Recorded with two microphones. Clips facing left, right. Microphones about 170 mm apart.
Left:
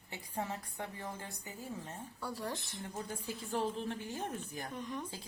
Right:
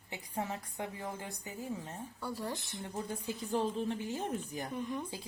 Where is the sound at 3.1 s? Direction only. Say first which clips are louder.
Right 5 dB; 20° right (ahead or behind).